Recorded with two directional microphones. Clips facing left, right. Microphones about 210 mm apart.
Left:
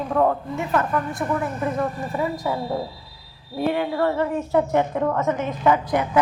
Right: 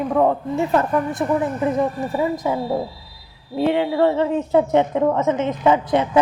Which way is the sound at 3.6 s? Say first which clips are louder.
Right 4 dB; 20° right (ahead or behind).